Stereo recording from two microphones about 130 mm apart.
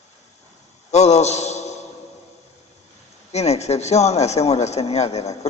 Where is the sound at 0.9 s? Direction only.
60° left (ahead or behind).